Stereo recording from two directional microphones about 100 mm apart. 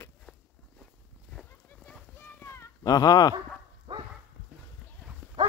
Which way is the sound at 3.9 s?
50° right (ahead or behind).